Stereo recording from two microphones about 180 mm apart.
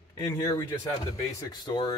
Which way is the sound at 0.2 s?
20° left (ahead or behind).